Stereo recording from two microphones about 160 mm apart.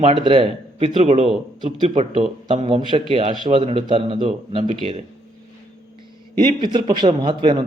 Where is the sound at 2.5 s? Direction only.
35° right (ahead or behind).